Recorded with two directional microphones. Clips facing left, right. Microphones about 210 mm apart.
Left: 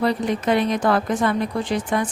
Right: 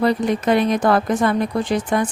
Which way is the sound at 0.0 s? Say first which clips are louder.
Right 3 dB; 45° right (ahead or behind).